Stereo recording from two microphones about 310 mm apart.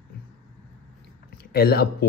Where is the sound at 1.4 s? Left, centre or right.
Left.